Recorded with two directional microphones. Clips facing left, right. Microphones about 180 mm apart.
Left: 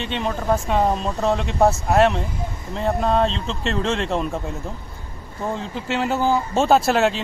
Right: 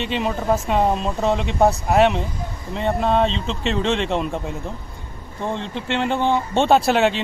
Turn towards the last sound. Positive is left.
turn(degrees=0)  # may be behind; listen again after turning